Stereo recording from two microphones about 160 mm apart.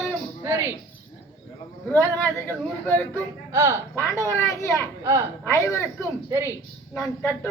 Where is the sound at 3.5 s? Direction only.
15° right (ahead or behind).